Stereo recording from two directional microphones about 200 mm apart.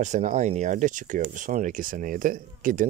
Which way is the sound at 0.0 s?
35° right (ahead or behind).